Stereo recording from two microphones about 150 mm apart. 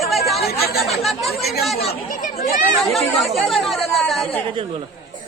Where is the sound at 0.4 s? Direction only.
90° left.